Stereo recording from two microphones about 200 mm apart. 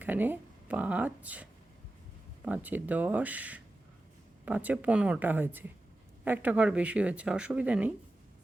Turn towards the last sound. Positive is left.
turn(degrees=-5)  # may be behind; listen again after turning